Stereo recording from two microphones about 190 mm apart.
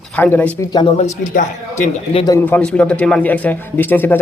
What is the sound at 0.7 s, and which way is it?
Speech, 25° left (ahead or behind).